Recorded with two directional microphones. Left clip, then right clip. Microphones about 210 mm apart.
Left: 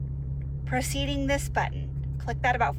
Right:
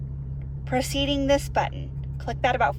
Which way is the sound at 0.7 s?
10° right (ahead or behind).